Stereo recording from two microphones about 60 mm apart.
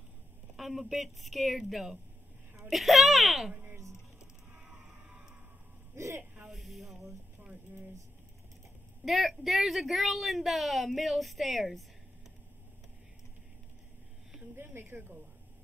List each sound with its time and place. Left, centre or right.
0.6 s a woman's voice: centre
5.9 s music: right
6.5 s a sound: centre
9.0 s a woman's voice: centre
14.5 s speech: right